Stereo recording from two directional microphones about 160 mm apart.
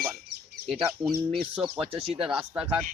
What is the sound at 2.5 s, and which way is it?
Speech, 10° right (ahead or behind).